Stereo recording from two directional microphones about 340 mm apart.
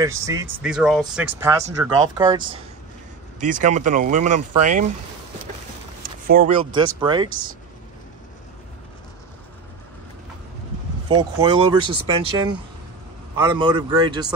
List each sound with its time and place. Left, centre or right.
0.0 s speech: centre
3.6 s speech: right
6.2 s speech: right
11.1 s speech: centre